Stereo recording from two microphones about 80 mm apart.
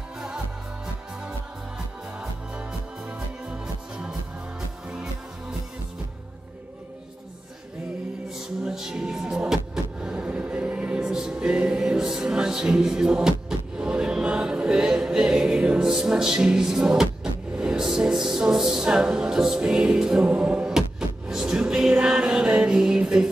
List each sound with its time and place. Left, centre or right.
3.1 s music: centre
8.4 s music: centre